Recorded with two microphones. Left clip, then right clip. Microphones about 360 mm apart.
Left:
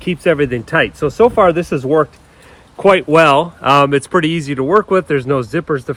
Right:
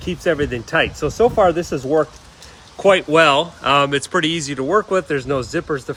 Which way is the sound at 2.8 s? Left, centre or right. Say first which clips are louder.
Left 3 dB; centre.